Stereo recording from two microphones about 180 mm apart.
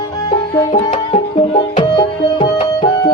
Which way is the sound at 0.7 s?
35° left (ahead or behind).